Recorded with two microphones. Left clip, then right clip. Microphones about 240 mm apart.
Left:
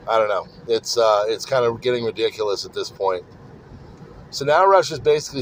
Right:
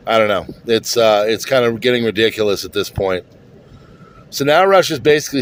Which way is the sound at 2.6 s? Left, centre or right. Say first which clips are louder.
Right 7 dB; right.